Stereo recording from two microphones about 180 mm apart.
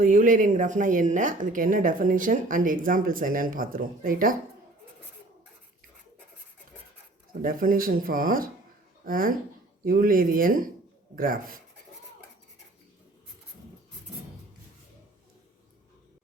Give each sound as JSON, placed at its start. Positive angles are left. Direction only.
{"t": 0.0, "sound": "speech", "side_deg": -45}
{"t": 7.4, "sound": "speech", "side_deg": -50}